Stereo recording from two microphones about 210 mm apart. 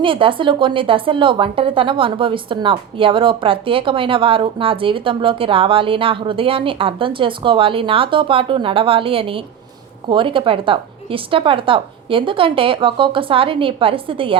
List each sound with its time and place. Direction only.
0.0 s speech: 25° right (ahead or behind)